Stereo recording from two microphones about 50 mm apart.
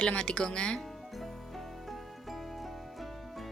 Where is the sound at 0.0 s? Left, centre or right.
Centre.